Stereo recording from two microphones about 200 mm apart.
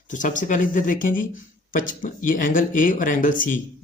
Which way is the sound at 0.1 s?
40° left (ahead or behind).